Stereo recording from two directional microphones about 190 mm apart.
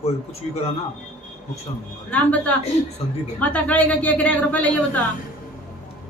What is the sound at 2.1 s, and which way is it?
Speech, 5° left (ahead or behind).